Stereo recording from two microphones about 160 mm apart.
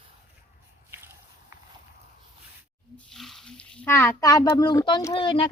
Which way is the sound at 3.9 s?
15° left (ahead or behind).